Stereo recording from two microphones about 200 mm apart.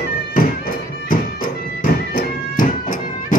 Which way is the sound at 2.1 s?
45° left (ahead or behind).